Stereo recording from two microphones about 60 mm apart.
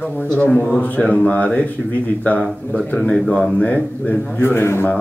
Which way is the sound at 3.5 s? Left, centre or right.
Left.